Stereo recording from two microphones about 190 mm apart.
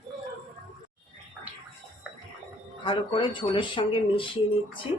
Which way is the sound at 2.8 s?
25° left (ahead or behind).